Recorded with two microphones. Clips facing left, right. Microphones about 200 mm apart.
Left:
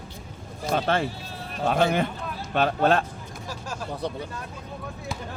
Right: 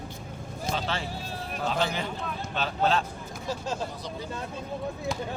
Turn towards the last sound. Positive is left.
turn(degrees=-20)  # may be behind; listen again after turning